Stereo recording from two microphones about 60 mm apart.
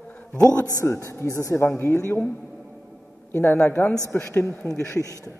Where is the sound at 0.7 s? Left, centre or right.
Left.